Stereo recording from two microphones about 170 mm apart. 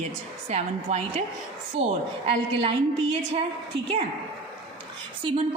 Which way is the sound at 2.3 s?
35° right (ahead or behind).